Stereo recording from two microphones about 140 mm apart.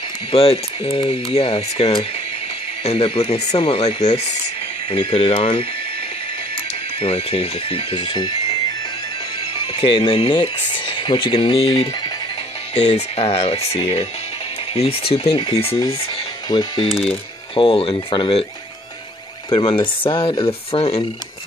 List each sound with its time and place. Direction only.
0.3 s speech: 45° left (ahead or behind)
7.0 s speech: 45° left (ahead or behind)
9.5 s speech: 40° left (ahead or behind)
12.7 s speech: 50° left (ahead or behind)
19.5 s speech: 40° left (ahead or behind)